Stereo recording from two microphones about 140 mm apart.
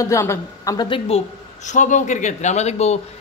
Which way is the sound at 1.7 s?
60° left (ahead or behind).